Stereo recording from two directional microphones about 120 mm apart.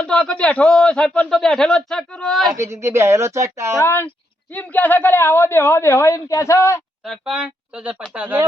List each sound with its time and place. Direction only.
0.0 s a man's voice: 5° left (ahead or behind)
2.5 s a woman's voice: 25° right (ahead or behind)
3.8 s a man's voice: 20° left (ahead or behind)
7.0 s speech: 5° right (ahead or behind)